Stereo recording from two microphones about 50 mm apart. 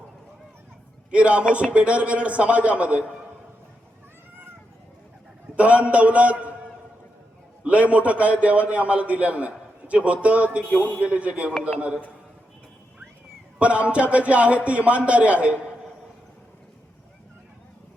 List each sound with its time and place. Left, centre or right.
1.1 s a man's voice: right
5.5 s a man's voice: right
7.6 s a man's voice: right
10.7 s a man's voice: left
11.0 s a man's voice: right
13.6 s a man's voice: right